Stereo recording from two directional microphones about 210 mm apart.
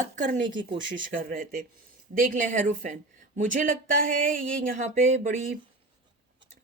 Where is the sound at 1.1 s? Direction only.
40° right (ahead or behind).